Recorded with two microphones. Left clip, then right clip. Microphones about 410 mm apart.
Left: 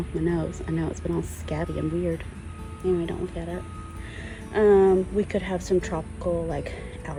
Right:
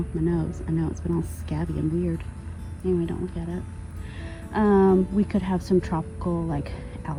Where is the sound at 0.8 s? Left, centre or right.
Left.